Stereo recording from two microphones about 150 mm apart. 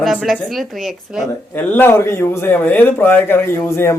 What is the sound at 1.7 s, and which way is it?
Speech, 15° left (ahead or behind).